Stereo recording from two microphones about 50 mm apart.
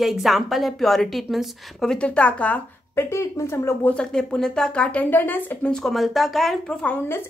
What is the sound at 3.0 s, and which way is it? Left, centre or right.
Speech, left.